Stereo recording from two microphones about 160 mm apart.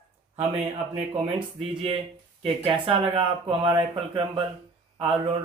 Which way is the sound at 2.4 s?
35° right (ahead or behind).